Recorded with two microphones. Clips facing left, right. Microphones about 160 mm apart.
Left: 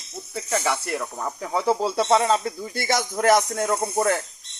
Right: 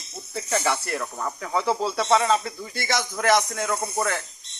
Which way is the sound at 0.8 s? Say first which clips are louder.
Left 1 dB; 10° left (ahead or behind).